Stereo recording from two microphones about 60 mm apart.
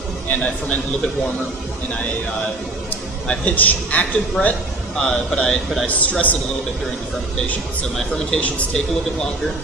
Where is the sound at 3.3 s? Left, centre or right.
Left.